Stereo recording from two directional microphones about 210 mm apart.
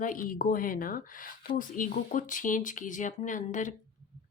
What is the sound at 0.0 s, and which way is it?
Speech, 40° left (ahead or behind).